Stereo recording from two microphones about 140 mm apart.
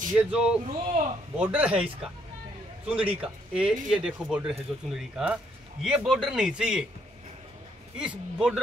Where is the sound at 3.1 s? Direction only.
5° right (ahead or behind).